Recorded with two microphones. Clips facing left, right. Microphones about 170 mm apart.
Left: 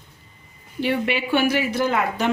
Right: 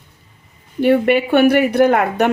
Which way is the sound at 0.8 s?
50° right (ahead or behind).